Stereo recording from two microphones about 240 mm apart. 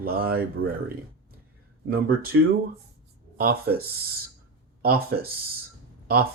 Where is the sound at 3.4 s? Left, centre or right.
Right.